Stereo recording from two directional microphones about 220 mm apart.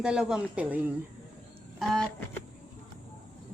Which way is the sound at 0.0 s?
5° right (ahead or behind).